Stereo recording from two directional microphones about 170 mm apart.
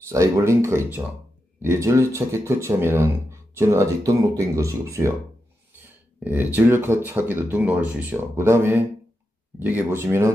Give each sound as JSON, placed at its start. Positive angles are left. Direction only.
{"t": 0.1, "sound": "speech", "side_deg": -15}